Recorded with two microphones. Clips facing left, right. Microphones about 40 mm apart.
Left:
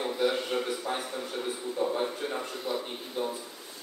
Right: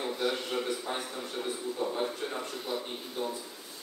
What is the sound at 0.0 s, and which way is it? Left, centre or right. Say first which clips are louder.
A man's voice: left 3 dB; centre.